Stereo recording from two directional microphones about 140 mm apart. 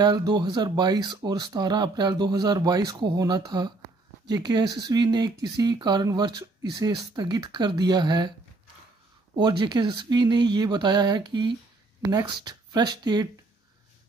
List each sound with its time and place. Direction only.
0.0 s speech: 30° right (ahead or behind)
9.3 s speech: 35° right (ahead or behind)